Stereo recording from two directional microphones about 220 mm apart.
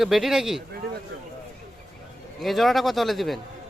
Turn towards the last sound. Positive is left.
turn(degrees=0)  # may be behind; listen again after turning